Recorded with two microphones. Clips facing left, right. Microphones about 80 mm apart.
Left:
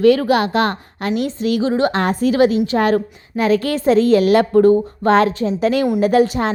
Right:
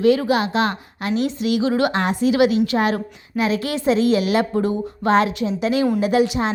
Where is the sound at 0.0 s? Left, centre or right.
Left.